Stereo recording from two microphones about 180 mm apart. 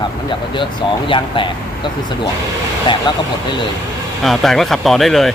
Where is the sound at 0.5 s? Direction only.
30° left (ahead or behind).